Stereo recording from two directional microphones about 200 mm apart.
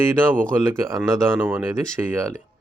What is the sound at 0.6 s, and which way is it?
Speech, 15° right (ahead or behind).